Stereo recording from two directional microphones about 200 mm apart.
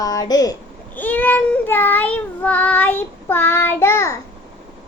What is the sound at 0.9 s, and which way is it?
Child singing, 10° left (ahead or behind).